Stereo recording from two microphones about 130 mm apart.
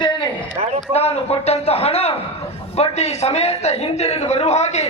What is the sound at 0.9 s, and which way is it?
A man's voice, 50° left (ahead or behind).